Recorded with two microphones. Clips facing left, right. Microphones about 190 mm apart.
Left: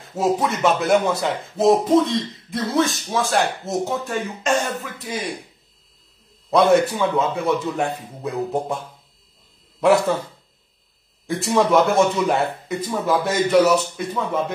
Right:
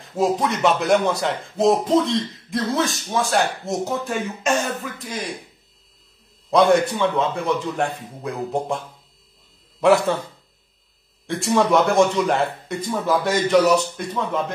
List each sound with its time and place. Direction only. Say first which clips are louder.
0.1 s speech: even; centre (ahead or behind)
6.5 s a man's voice: even; centre (ahead or behind)
11.2 s speech: even; centre (ahead or behind)